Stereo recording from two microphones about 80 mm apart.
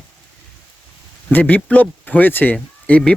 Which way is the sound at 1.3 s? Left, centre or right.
Left.